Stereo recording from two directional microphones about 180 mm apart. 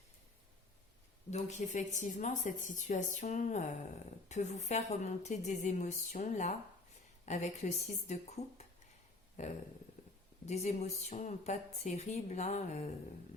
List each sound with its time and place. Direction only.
1.3 s speech: 40° left (ahead or behind)